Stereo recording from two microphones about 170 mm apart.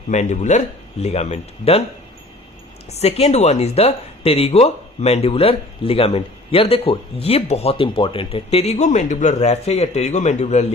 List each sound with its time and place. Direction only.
0.1 s speech: 45° left (ahead or behind)
2.9 s speech: 35° left (ahead or behind)